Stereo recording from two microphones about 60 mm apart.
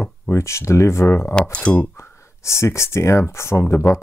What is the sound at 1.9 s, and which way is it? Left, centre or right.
Speech, left.